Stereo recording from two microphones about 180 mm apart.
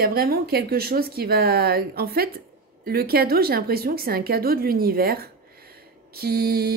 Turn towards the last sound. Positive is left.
turn(degrees=-60)  # may be behind; listen again after turning